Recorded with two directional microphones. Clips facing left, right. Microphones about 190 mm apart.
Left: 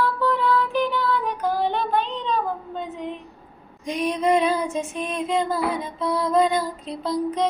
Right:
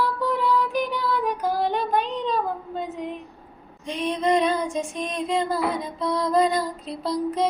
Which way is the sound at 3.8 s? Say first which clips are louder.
Left 2 dB; 10° left (ahead or behind).